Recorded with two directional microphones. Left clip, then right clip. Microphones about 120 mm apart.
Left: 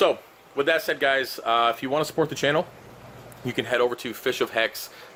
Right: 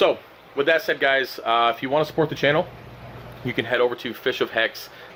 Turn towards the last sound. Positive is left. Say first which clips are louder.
# right 2 dB
turn(degrees=40)  # may be behind; listen again after turning